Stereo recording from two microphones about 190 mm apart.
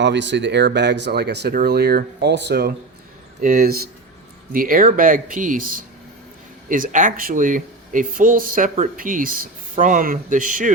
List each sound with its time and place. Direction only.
0.0 s speech: 65° right (ahead or behind); by 10.7 s 45° right (ahead or behind)